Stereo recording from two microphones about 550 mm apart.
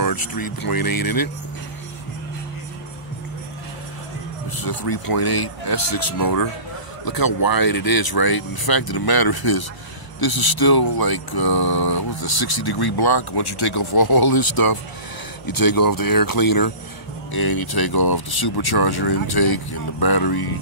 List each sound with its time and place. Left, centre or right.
0.0 s speech: left
4.5 s speech: left